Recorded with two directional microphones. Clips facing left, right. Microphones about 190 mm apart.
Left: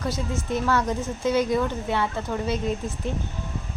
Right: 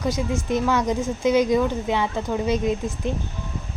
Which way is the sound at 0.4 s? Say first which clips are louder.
Right 2 dB; 15° right (ahead or behind).